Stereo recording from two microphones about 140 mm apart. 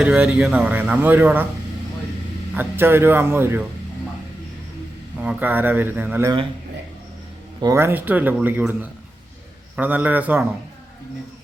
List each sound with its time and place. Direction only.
0.0 s a man's voice: 10° right (ahead or behind)
2.6 s a man's voice: 15° right (ahead or behind)
5.2 s a man's voice: 10° right (ahead or behind)
7.6 s a man's voice: 20° right (ahead or behind)